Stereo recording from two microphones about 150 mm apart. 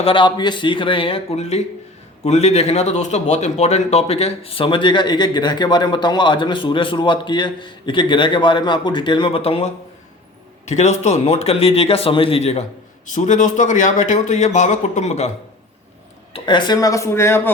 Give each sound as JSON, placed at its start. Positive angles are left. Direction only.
{"t": 0.0, "sound": "speech", "side_deg": 35}
{"t": 10.7, "sound": "speech", "side_deg": 50}
{"t": 13.1, "sound": "a man's voice", "side_deg": 55}
{"t": 16.3, "sound": "speech", "side_deg": 30}